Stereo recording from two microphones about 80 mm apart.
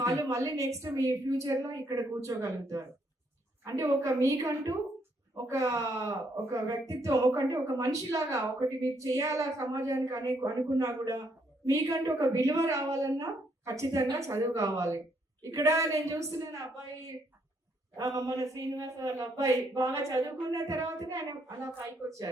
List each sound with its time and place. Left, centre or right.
0.0 s a woman's voice: right
17.9 s speech: right